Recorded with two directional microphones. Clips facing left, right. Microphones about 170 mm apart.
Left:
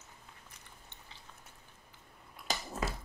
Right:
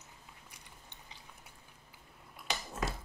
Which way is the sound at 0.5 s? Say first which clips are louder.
Even; 15° right (ahead or behind).